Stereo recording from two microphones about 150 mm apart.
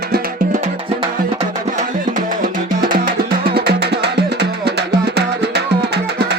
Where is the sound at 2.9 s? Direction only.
80° right.